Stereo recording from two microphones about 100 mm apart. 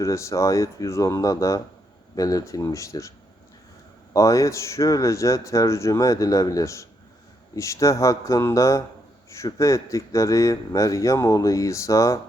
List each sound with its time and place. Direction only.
0.0 s speech: 30° left (ahead or behind)
4.1 s speech: 35° left (ahead or behind)